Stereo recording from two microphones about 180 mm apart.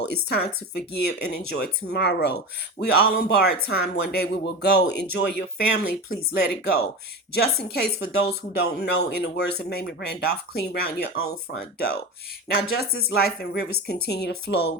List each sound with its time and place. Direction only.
0.1 s speech: 65° left (ahead or behind)